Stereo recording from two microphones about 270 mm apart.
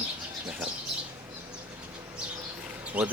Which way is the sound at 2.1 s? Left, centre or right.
Centre.